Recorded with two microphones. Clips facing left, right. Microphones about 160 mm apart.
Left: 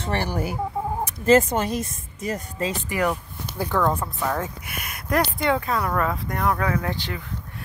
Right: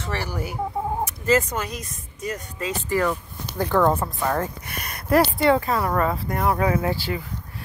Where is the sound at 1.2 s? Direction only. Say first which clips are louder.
Left 5 dB; 30° left (ahead or behind).